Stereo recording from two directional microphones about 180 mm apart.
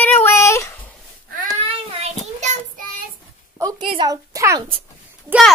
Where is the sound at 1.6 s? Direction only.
40° right (ahead or behind).